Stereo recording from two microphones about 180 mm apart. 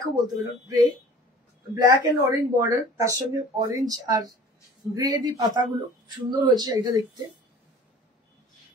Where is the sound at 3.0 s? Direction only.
20° right (ahead or behind).